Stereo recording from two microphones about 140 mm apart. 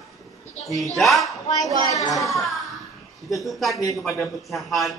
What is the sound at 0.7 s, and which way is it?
Speech, centre (ahead or behind).